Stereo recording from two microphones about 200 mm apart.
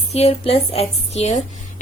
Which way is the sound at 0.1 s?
30° left (ahead or behind).